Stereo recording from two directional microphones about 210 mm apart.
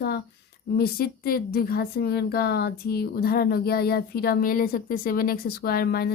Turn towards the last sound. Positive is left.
turn(degrees=45)  # may be behind; listen again after turning